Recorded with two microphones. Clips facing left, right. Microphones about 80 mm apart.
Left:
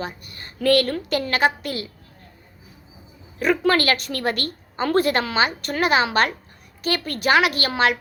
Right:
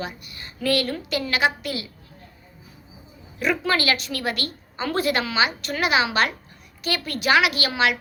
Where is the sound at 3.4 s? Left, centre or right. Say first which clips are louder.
Left 4 dB; left.